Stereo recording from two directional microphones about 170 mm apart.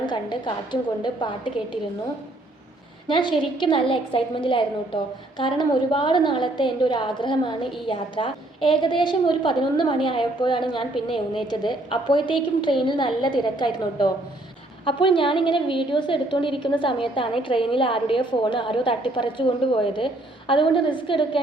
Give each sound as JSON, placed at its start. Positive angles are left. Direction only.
{"t": 0.0, "sound": "a woman's voice", "side_deg": 25}
{"t": 3.1, "sound": "a woman's voice", "side_deg": 30}